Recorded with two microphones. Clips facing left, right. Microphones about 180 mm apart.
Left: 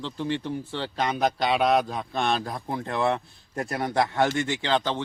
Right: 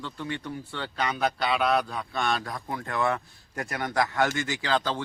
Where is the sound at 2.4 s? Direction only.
30° left (ahead or behind).